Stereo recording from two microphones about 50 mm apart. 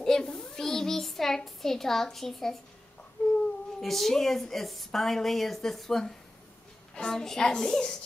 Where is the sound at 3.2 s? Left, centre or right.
Left.